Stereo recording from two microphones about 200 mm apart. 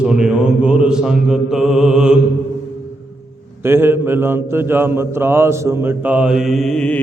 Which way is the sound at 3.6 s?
10° right (ahead or behind).